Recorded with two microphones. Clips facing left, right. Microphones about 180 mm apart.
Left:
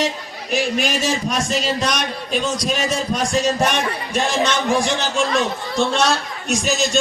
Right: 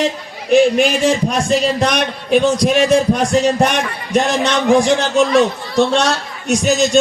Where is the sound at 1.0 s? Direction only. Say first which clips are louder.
Right 6 dB; 60° right (ahead or behind).